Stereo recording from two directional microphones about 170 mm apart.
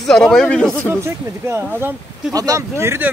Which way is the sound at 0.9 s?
15° right (ahead or behind).